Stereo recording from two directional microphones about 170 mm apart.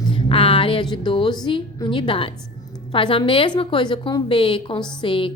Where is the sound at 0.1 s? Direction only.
30° left (ahead or behind).